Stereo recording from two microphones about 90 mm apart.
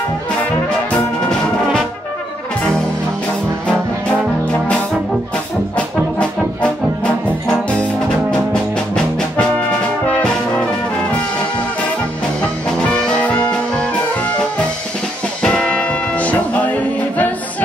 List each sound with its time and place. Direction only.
0.9 s brass instrument: 5° left (ahead or behind)
8.9 s brass instrument: 10° left (ahead or behind)
13.2 s music: 15° left (ahead or behind)
15.4 s music: 10° left (ahead or behind)